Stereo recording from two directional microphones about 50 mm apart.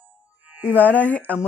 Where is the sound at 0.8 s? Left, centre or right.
Left.